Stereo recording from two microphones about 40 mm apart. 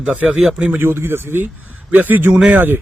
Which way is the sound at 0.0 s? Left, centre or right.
Right.